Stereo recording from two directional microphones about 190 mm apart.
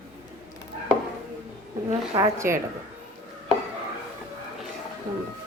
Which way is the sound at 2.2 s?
15° right (ahead or behind).